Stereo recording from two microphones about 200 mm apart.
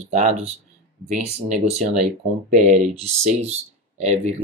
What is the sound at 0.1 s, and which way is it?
Speech, 35° right (ahead or behind).